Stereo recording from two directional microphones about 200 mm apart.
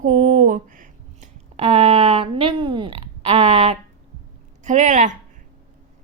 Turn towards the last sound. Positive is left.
turn(degrees=-40)  # may be behind; listen again after turning